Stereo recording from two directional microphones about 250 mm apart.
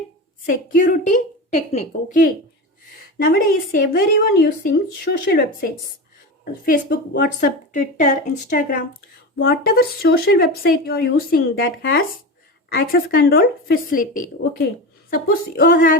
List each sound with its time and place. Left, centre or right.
0.4 s speech: left
9.5 s speech: left